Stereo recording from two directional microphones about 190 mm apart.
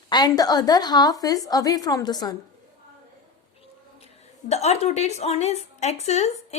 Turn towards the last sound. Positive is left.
turn(degrees=35)  # may be behind; listen again after turning